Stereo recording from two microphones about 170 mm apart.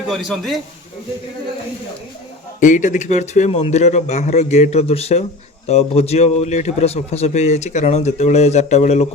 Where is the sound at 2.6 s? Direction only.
45° left (ahead or behind).